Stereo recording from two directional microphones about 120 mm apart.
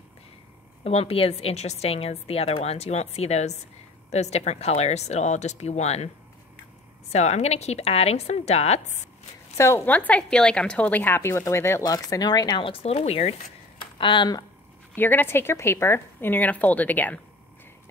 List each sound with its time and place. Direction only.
0.8 s a woman's voice: 55° left (ahead or behind)
7.1 s a woman's voice: 70° left (ahead or behind)
9.6 s a woman's voice: 20° left (ahead or behind); by 13.4 s 55° left (ahead or behind)
13.9 s speech: 40° left (ahead or behind)
15.0 s speech: 15° left (ahead or behind)